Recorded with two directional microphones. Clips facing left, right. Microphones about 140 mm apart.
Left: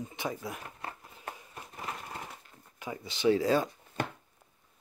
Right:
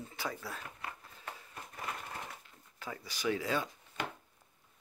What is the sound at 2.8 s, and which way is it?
Speech, 20° left (ahead or behind).